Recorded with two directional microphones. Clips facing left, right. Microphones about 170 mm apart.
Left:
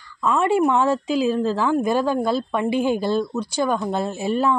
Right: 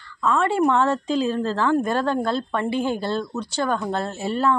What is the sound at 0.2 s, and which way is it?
Speech, 15° left (ahead or behind).